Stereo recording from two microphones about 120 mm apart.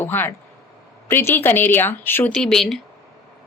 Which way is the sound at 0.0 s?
15° left (ahead or behind).